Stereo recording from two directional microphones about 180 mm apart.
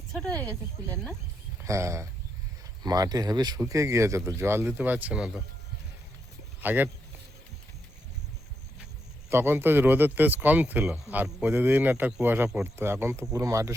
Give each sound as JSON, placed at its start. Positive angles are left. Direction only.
{"t": 0.1, "sound": "a sound", "side_deg": 5}
{"t": 0.9, "sound": "speech", "side_deg": 5}
{"t": 1.6, "sound": "speech", "side_deg": -15}
{"t": 6.6, "sound": "speech", "side_deg": -10}
{"t": 9.3, "sound": "speech", "side_deg": -10}